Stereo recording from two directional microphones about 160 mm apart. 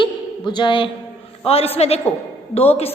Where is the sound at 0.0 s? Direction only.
30° left (ahead or behind).